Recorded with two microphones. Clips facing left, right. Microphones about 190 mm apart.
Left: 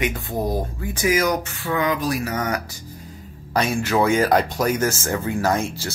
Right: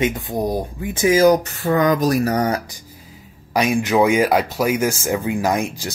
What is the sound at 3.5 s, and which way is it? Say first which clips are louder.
Speech: right 4 dB; 15° right (ahead or behind).